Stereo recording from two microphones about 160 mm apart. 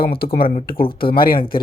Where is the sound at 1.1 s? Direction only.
65° left (ahead or behind).